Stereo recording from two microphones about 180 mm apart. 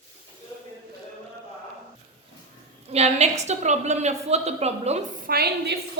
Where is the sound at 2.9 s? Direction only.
35° right (ahead or behind); by 5.7 s 60° right (ahead or behind).